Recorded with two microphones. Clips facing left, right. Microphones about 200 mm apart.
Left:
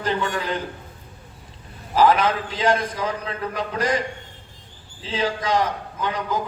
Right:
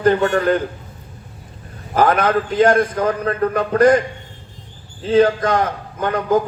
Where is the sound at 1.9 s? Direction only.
55° right (ahead or behind).